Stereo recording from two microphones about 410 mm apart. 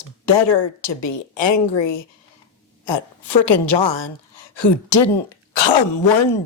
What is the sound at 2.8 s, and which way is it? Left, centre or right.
A woman's voice, left.